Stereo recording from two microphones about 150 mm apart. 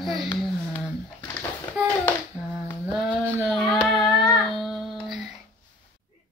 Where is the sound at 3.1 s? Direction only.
10° right (ahead or behind).